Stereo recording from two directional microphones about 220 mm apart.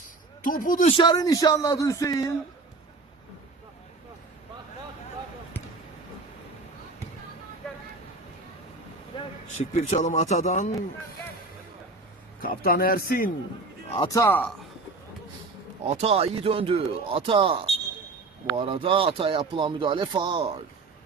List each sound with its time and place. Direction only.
0.4 s a man's voice: 40° left (ahead or behind)
0.9 s a man's voice: 20° left (ahead or behind)
9.1 s a man's voice: 30° left (ahead or behind)
12.4 s a man's voice: 40° left (ahead or behind)
14.0 s a man's voice: 15° left (ahead or behind)
16.0 s speech: 25° right (ahead or behind)